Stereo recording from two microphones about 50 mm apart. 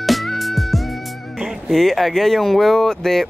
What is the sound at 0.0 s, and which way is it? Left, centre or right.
Speech, centre.